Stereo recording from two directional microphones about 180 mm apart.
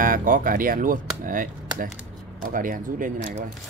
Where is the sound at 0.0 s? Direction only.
50° right (ahead or behind).